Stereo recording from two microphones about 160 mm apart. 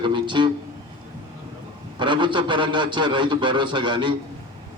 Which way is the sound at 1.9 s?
30° right (ahead or behind).